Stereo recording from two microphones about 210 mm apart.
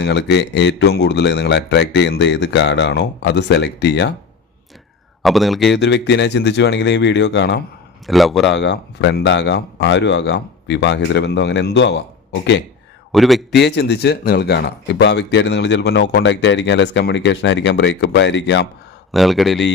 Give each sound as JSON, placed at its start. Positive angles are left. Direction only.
{"t": 0.0, "sound": "speech", "side_deg": 55}
{"t": 5.2, "sound": "speech", "side_deg": 0}
{"t": 5.8, "sound": "speech", "side_deg": 55}
{"t": 8.0, "sound": "speech", "side_deg": 0}
{"t": 8.4, "sound": "speech", "side_deg": 60}
{"t": 13.1, "sound": "speech", "side_deg": 0}
{"t": 13.6, "sound": "speech", "side_deg": 55}
{"t": 19.1, "sound": "speech", "side_deg": 0}